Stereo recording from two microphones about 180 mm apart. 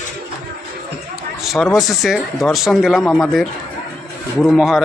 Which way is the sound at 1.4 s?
Centre (ahead or behind).